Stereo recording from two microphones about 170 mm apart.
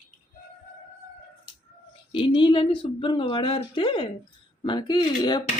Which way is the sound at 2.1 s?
30° left (ahead or behind).